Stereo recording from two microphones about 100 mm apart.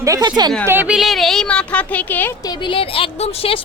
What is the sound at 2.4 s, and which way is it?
Speech, 60° left (ahead or behind).